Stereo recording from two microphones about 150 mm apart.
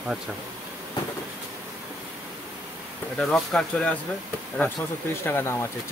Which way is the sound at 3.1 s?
5° left (ahead or behind).